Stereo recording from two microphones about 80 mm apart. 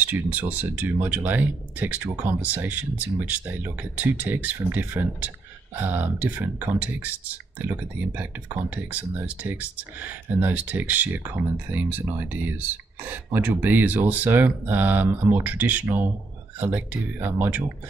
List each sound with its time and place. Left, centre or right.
0.0 s speech: right